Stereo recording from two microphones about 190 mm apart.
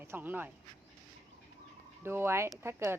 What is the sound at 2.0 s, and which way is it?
Speech, 10° right (ahead or behind).